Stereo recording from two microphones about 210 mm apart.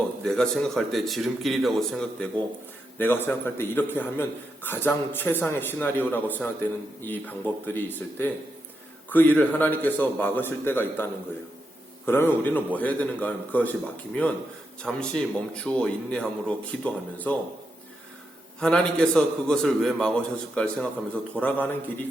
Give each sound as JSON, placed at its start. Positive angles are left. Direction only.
{"t": 0.3, "sound": "a man's voice", "side_deg": 5}
{"t": 18.6, "sound": "a man's voice", "side_deg": 5}